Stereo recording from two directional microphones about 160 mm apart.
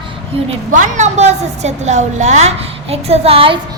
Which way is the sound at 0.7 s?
50° right (ahead or behind).